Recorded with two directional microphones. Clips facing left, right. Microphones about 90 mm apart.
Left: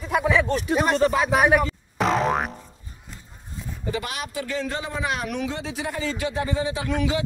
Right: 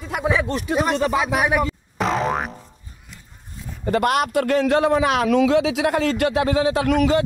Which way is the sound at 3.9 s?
60° right (ahead or behind).